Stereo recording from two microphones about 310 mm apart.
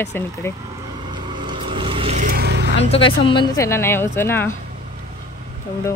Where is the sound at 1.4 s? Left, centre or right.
Centre; by 2.6 s right.